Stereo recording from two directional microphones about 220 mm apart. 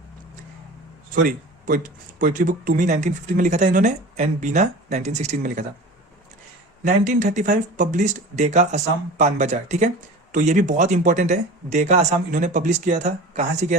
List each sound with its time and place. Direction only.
1.1 s speech: 35° right (ahead or behind)
6.8 s speech: 35° right (ahead or behind)